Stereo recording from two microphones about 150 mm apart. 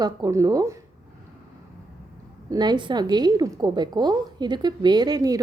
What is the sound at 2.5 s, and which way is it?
A woman's voice, 30° right (ahead or behind).